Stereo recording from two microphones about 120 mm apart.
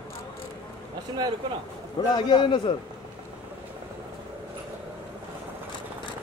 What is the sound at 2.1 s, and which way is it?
Speech, 40° left (ahead or behind).